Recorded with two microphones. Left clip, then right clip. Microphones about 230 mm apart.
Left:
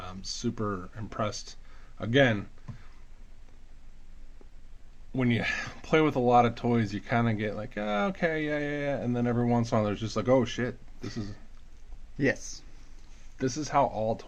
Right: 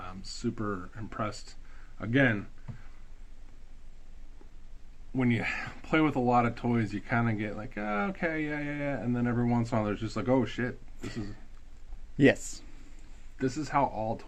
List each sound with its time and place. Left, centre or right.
0.0 s speech: left
5.1 s speech: left
12.1 s speech: right
13.4 s speech: left